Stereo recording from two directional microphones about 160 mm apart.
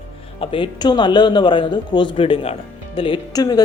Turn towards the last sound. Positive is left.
turn(degrees=25)  # may be behind; listen again after turning